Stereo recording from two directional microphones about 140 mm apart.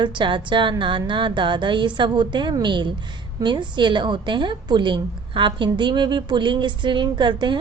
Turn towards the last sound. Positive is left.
turn(degrees=-35)  # may be behind; listen again after turning